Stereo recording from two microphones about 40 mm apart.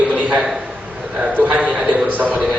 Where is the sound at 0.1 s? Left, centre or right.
Right.